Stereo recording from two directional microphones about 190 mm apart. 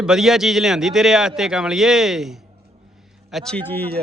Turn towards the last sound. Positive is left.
turn(degrees=5)  # may be behind; listen again after turning